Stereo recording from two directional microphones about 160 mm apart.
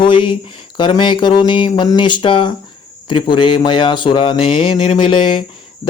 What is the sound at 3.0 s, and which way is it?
Speech, 30° left (ahead or behind).